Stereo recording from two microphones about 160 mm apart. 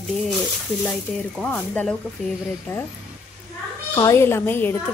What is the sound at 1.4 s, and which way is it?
Speech, 10° left (ahead or behind).